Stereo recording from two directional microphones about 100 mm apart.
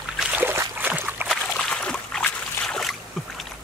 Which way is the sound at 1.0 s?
20° right (ahead or behind).